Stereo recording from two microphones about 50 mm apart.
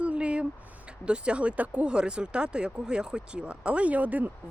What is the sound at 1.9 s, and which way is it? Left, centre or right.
Speech, centre.